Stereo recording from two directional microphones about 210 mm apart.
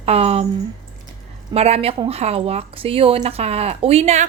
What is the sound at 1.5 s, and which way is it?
Speech, 30° right (ahead or behind).